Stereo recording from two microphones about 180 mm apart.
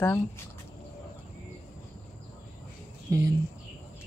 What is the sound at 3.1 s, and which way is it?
Speech, 20° right (ahead or behind).